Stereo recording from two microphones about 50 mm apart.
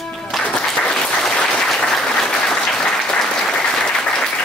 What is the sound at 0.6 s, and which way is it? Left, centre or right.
Applause, centre.